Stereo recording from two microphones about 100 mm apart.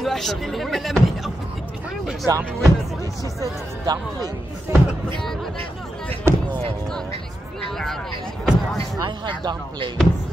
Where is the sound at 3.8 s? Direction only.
40° right (ahead or behind).